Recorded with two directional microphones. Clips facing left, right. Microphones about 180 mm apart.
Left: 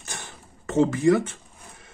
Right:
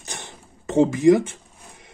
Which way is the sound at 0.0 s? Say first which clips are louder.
Right 2 dB; 20° right (ahead or behind).